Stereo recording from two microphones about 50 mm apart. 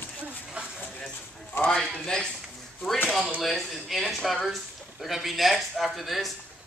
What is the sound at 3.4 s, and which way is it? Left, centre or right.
Speech, centre.